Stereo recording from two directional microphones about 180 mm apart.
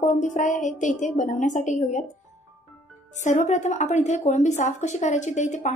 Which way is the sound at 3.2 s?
45° left (ahead or behind).